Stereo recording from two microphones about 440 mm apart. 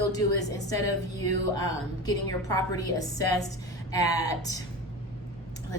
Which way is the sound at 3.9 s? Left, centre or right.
Centre.